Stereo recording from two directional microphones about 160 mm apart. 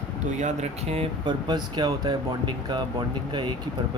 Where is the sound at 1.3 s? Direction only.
25° right (ahead or behind).